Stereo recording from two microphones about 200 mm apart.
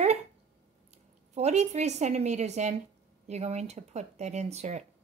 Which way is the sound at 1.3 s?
35° right (ahead or behind).